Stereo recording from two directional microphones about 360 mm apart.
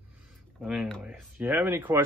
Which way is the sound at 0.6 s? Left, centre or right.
Centre.